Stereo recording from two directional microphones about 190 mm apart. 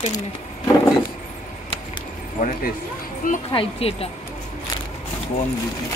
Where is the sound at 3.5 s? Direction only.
30° left (ahead or behind).